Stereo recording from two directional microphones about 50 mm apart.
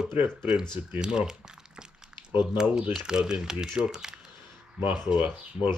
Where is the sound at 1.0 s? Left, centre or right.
Centre.